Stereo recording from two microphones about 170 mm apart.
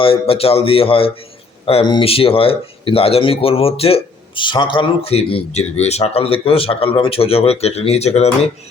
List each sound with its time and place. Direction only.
0.0 s speech: 35° left (ahead or behind)